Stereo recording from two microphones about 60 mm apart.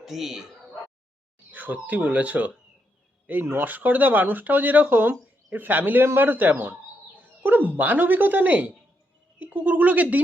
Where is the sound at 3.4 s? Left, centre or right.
Right.